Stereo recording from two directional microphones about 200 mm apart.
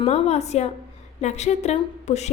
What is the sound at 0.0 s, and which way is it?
A woman's voice, 35° left (ahead or behind).